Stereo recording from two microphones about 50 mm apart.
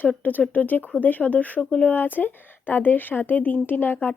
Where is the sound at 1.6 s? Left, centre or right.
Centre.